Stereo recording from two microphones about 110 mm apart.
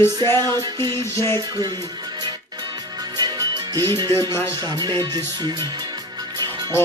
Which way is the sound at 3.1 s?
35° right (ahead or behind).